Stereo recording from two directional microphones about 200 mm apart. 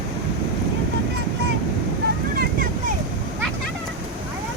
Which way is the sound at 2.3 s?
50° right (ahead or behind).